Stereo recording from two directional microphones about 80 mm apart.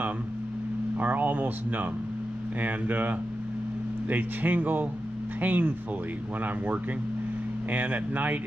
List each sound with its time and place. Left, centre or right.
0.9 s speech: right